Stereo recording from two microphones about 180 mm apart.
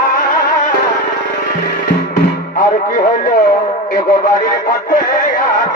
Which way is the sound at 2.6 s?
50° left (ahead or behind).